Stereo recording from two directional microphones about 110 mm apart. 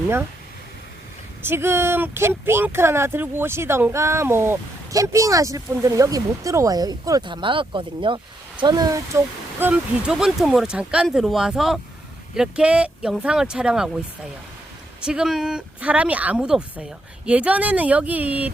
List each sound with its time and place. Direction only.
1.4 s speech: 20° right (ahead or behind)
7.3 s speech: 50° right (ahead or behind)
8.6 s speech: 40° right (ahead or behind)
9.6 s speech: 15° right (ahead or behind)
10.1 s a woman's voice: 5° right (ahead or behind)
15.0 s a woman's voice: 5° right (ahead or behind)